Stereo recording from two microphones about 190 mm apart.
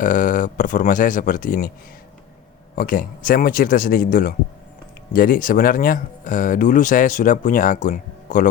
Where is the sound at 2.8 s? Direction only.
45° left (ahead or behind).